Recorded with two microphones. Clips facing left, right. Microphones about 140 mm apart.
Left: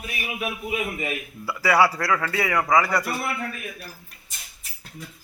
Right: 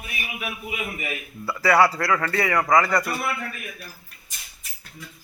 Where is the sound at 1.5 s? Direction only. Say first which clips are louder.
Right 1 dB; 10° left (ahead or behind).